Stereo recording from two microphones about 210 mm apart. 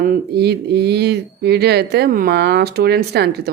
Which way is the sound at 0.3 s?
50° right (ahead or behind).